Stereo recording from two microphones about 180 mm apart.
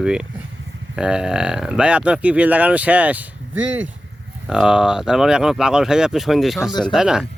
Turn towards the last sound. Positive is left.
turn(degrees=-5)  # may be behind; listen again after turning